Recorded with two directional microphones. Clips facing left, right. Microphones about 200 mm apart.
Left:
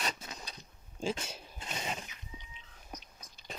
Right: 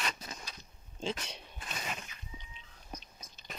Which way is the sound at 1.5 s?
25° left (ahead or behind).